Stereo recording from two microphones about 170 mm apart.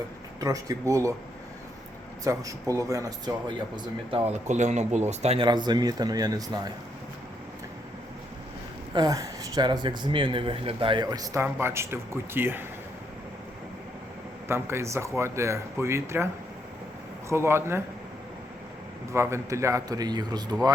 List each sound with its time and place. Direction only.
0.3 s speech: 20° right (ahead or behind)
2.2 s speech: 20° right (ahead or behind)
4.1 s speech: 35° right (ahead or behind)
4.4 s speech: 45° right (ahead or behind); by 6.6 s 20° right (ahead or behind)
9.0 s a man's voice: 20° right (ahead or behind)
14.4 s a man's voice: 15° right (ahead or behind)
19.1 s speech: 15° right (ahead or behind)